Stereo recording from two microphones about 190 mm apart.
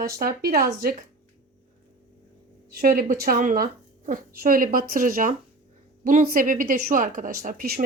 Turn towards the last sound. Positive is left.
turn(degrees=-50)  # may be behind; listen again after turning